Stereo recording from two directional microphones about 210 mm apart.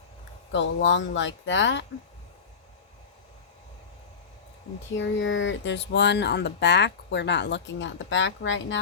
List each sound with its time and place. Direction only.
0.5 s speech: 60° left (ahead or behind)
4.9 s speech: 60° left (ahead or behind)